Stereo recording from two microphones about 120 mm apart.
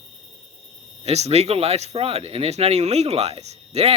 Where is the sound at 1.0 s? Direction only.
65° right (ahead or behind).